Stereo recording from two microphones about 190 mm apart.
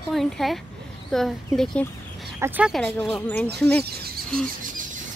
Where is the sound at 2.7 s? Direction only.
5° left (ahead or behind).